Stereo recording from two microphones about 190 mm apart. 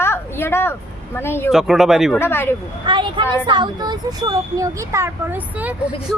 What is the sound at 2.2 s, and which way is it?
Speech, 10° left (ahead or behind).